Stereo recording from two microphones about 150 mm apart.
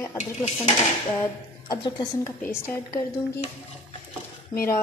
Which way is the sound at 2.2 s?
15° left (ahead or behind).